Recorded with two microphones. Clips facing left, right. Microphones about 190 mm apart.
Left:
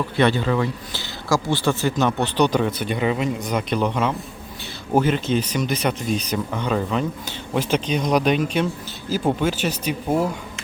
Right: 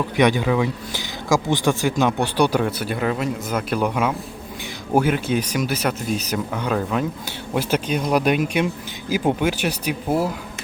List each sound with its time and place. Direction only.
0.2 s speech: 15° right (ahead or behind)